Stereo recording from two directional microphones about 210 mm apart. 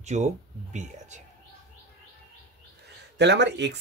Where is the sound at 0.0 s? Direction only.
35° right (ahead or behind).